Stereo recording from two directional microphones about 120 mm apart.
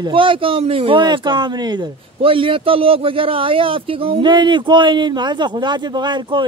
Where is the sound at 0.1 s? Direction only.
45° right (ahead or behind).